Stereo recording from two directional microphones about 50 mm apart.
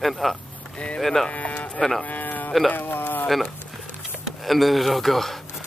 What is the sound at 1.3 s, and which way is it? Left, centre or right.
Speech, left.